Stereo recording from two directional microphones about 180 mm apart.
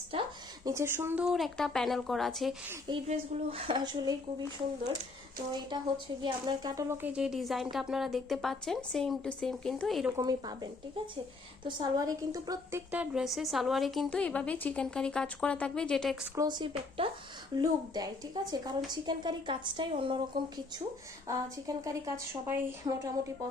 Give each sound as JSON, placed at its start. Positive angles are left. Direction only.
{"t": 0.1, "sound": "a sound", "side_deg": -30}
{"t": 0.6, "sound": "speech", "side_deg": -15}
{"t": 3.1, "sound": "a woman's voice", "side_deg": -35}
{"t": 6.2, "sound": "speech", "side_deg": -25}
{"t": 10.1, "sound": "a woman's voice", "side_deg": -20}
{"t": 12.9, "sound": "speech", "side_deg": -5}
{"t": 16.3, "sound": "a woman's voice", "side_deg": -20}
{"t": 21.8, "sound": "speech", "side_deg": -15}